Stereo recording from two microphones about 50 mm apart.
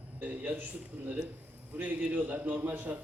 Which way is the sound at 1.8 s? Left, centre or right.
Right.